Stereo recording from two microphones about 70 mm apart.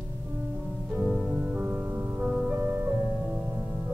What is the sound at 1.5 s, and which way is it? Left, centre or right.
Music, centre.